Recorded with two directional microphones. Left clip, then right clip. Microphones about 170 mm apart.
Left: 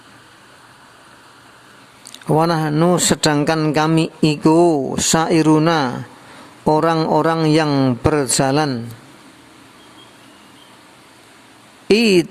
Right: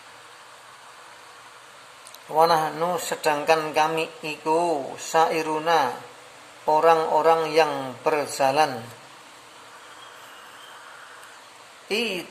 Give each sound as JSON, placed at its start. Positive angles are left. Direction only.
{"t": 2.3, "sound": "speech", "side_deg": 45}
{"t": 11.9, "sound": "speech", "side_deg": 45}